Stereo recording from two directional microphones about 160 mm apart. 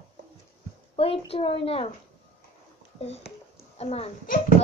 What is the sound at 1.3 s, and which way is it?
Speech, 35° left (ahead or behind).